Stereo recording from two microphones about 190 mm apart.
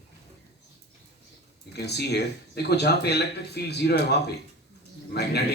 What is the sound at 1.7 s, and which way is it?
Speech, 60° left (ahead or behind).